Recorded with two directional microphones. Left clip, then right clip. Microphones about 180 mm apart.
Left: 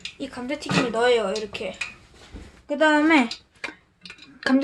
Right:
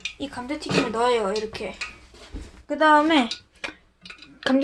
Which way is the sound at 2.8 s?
20° left (ahead or behind).